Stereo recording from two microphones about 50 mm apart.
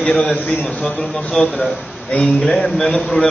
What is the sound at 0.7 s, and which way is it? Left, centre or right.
Speech, left.